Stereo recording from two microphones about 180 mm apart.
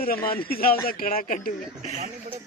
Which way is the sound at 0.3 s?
55° left (ahead or behind).